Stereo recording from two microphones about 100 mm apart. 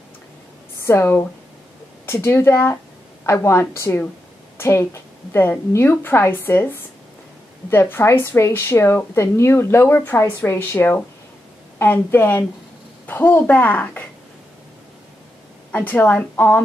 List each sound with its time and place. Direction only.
0.8 s a woman's voice: 25° left (ahead or behind)
15.7 s a child's voice: 20° left (ahead or behind)